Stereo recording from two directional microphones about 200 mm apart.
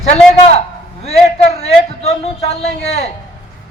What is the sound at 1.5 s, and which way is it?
A man's voice, 30° left (ahead or behind).